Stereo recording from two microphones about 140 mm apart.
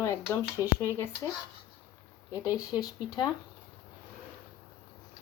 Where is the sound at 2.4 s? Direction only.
25° left (ahead or behind).